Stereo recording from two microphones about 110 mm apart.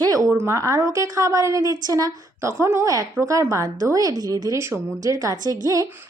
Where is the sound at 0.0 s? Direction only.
30° right (ahead or behind).